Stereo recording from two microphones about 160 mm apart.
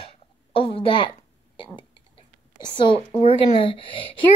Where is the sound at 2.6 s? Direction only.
30° left (ahead or behind).